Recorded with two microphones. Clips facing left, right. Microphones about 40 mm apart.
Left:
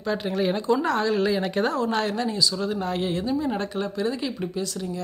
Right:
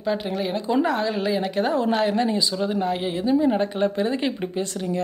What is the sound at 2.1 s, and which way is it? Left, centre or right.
Speech, right.